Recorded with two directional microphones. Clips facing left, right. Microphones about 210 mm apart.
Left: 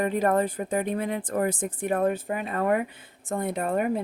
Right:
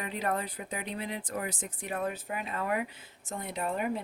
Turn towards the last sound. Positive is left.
turn(degrees=50)  # may be behind; listen again after turning